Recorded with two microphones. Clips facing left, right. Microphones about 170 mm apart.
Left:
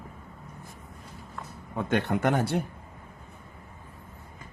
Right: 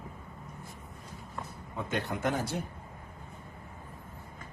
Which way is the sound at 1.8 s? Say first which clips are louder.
Left 7 dB; 65° left (ahead or behind).